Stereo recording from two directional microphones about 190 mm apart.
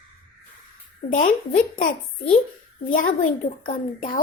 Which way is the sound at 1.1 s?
45° left (ahead or behind).